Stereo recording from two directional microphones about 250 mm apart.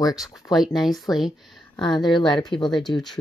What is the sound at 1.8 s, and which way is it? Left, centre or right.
Speech, centre.